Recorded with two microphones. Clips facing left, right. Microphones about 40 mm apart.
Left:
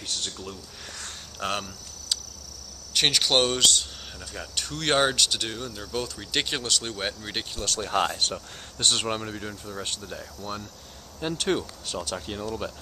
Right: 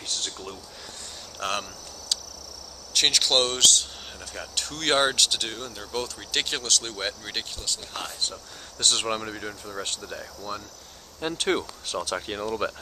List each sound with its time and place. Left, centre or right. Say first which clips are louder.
1.4 s a sound: even; centre
2.9 s speech: even; centre
7.6 s speech: left 9 dB; left
9.0 s speech: right 1 dB; centre
12.3 s speech: right 3 dB; right